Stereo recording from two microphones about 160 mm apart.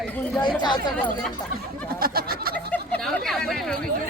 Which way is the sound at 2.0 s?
70° right (ahead or behind).